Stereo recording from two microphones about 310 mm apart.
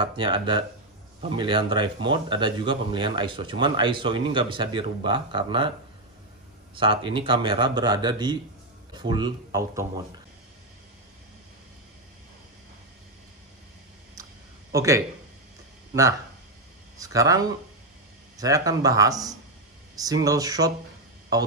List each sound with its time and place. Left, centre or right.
0.0 s speech: centre
6.8 s speech: centre
14.2 s a sound: centre
14.7 s speech: centre